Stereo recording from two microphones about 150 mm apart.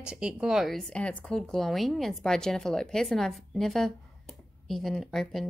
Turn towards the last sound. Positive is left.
turn(degrees=0)  # may be behind; listen again after turning